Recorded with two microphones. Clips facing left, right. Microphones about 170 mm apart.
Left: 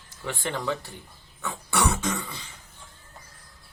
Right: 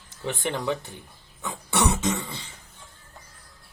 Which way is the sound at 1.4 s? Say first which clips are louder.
Right 1 dB; 20° right (ahead or behind).